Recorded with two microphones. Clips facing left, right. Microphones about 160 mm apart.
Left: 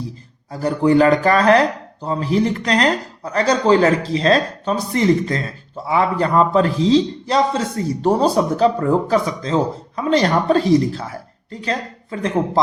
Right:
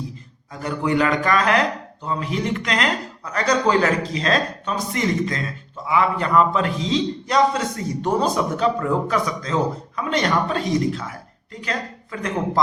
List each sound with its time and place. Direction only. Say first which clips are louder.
0.5 s a man's voice: left 7 dB; 35° left (ahead or behind)